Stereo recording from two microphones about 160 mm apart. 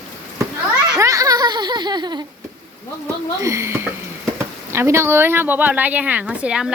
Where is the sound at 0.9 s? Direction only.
20° right (ahead or behind).